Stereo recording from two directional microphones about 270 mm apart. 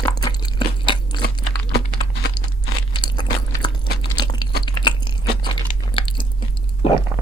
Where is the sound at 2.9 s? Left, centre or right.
Centre.